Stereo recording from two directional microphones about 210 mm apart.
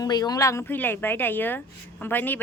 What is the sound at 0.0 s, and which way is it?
Speech, 20° left (ahead or behind).